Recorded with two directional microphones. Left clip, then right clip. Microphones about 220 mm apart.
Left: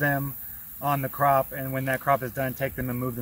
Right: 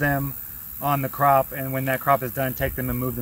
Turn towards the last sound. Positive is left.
turn(degrees=0)  # may be behind; listen again after turning